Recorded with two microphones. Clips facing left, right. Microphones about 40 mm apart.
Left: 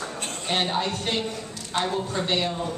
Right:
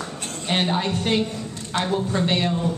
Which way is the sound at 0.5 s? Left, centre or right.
Centre.